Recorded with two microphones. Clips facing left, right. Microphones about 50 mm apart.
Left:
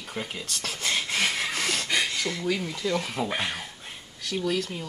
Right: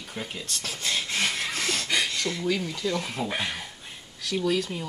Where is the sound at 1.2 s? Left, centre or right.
Centre.